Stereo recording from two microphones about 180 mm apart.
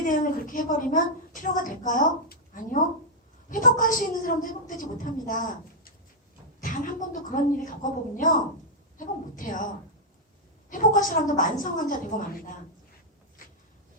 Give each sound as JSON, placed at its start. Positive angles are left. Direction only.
{"t": 0.1, "sound": "a woman's voice", "side_deg": 50}
{"t": 10.7, "sound": "a woman's voice", "side_deg": 45}